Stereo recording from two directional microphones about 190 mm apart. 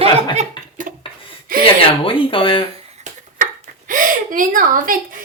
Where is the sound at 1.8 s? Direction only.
30° left (ahead or behind).